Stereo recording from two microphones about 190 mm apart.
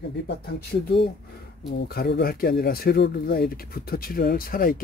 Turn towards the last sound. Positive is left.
turn(degrees=50)  # may be behind; listen again after turning